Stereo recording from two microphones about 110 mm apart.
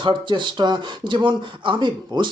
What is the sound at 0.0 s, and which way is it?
Speech, 45° right (ahead or behind).